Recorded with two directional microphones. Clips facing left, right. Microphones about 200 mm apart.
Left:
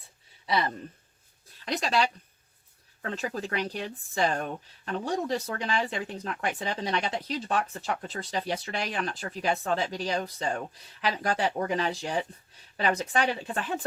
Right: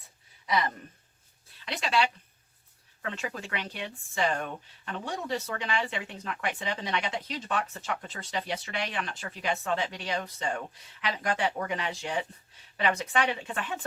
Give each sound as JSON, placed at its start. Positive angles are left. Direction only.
{"t": 0.4, "sound": "speech", "side_deg": 30}
{"t": 1.6, "sound": "speech", "side_deg": 40}